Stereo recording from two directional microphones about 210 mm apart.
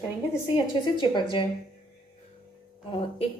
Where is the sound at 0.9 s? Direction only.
20° left (ahead or behind).